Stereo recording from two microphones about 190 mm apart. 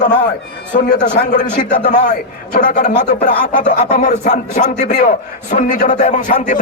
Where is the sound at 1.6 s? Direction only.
45° left (ahead or behind).